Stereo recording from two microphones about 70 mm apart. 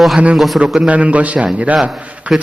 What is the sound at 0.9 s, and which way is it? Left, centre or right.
Speech, centre.